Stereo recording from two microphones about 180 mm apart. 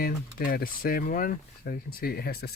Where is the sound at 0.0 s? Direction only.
55° left (ahead or behind).